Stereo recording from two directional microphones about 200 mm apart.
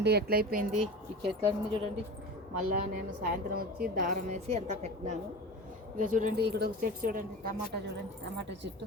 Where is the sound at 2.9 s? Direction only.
45° right (ahead or behind).